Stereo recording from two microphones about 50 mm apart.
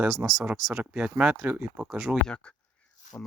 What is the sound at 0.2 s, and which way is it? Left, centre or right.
Speech, right.